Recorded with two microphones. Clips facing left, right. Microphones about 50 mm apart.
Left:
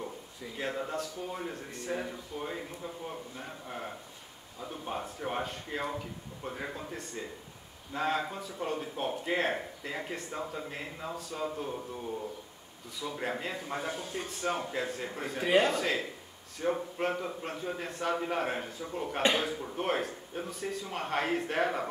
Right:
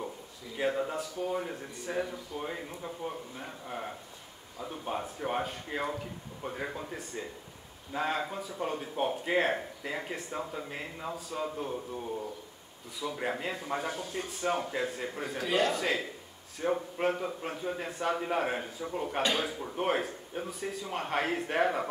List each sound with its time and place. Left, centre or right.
0.6 s speech: centre
13.0 s speech: centre
15.4 s speech: left
15.7 s speech: centre